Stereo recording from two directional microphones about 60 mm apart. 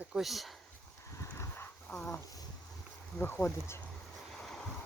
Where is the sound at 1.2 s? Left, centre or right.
Left.